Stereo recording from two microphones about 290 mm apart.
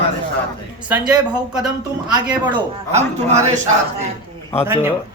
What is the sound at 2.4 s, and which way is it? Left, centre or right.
Speech, centre.